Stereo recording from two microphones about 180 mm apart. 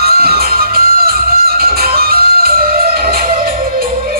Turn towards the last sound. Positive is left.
turn(degrees=-55)  # may be behind; listen again after turning